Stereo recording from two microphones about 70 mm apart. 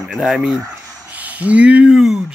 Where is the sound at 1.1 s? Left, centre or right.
Right.